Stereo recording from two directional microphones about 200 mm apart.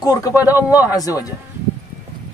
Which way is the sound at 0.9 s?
15° left (ahead or behind).